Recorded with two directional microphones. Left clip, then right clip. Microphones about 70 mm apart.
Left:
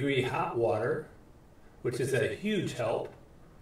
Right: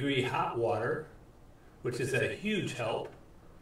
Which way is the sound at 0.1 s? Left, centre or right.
Left.